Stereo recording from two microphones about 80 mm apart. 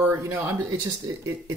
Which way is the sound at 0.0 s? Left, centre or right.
Right.